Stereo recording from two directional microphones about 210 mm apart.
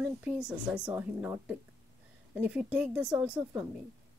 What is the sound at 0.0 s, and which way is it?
Speech, 5° right (ahead or behind).